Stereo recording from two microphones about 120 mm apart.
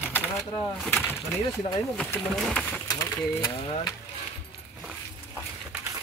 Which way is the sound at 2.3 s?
5° left (ahead or behind).